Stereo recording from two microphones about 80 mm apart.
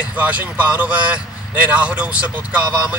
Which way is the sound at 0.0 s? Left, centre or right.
Centre.